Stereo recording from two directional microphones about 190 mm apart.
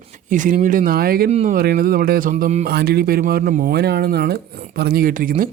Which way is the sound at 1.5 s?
50° right (ahead or behind).